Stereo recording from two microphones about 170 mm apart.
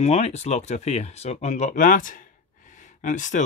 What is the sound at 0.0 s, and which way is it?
Speech, 40° left (ahead or behind).